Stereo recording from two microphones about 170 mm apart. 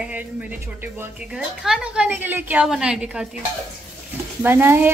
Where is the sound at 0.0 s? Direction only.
10° right (ahead or behind).